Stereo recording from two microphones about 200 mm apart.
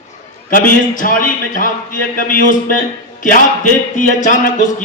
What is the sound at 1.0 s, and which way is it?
A man's voice, 40° left (ahead or behind).